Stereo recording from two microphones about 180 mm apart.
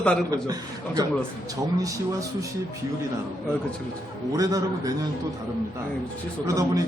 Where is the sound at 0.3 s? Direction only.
20° right (ahead or behind).